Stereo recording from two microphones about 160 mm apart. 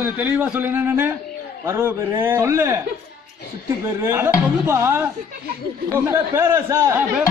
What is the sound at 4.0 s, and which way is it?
A man's voice, 15° right (ahead or behind).